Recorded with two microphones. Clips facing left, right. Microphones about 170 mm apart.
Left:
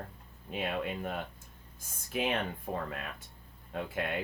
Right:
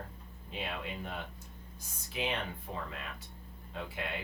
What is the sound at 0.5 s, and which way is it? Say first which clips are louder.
Speech: left 5 dB; 55° left (ahead or behind).